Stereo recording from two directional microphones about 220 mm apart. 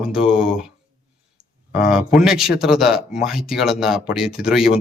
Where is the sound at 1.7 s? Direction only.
5° right (ahead or behind).